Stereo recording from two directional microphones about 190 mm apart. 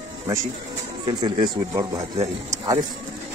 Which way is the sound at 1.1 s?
25° right (ahead or behind).